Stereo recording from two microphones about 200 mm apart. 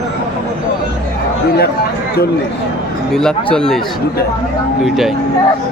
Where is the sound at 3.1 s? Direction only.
5° left (ahead or behind).